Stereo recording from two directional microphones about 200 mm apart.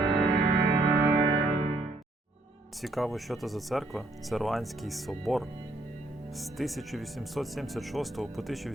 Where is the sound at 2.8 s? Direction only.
Centre (ahead or behind).